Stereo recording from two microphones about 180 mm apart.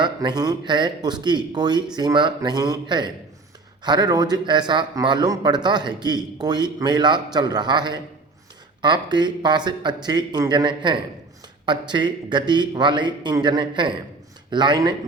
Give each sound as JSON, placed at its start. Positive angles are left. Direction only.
{"t": 0.0, "sound": "a man's voice", "side_deg": -25}